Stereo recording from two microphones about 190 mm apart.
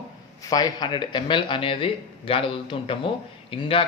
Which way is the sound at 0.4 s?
20° left (ahead or behind).